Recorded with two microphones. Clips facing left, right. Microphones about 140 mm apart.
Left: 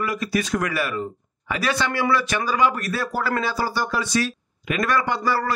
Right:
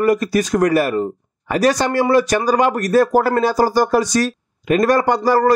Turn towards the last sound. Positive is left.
turn(degrees=-40)  # may be behind; listen again after turning